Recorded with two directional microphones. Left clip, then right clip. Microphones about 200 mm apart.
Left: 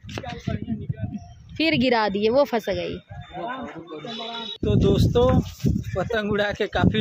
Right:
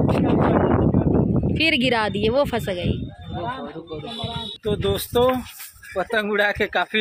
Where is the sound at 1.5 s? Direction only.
10° left (ahead or behind).